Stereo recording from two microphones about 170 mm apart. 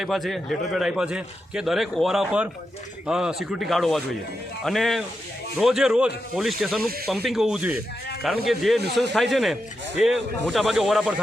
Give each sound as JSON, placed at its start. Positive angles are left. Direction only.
{"t": 0.0, "sound": "a man's voice", "side_deg": 0}